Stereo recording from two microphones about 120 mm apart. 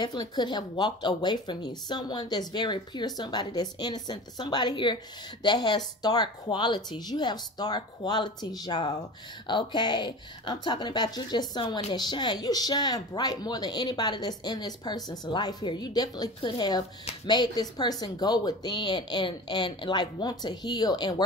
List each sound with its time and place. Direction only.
0.4 s speech: 35° left (ahead or behind)